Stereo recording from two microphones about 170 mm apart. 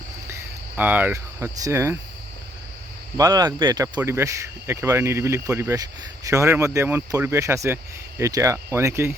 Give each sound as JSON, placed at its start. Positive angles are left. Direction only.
{"t": 0.8, "sound": "speech", "side_deg": -10}
{"t": 3.2, "sound": "speech", "side_deg": -20}